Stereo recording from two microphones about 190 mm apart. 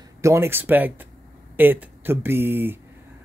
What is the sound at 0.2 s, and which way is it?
Speech, 15° right (ahead or behind).